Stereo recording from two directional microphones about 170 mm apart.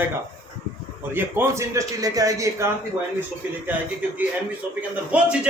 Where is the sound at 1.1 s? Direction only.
10° right (ahead or behind).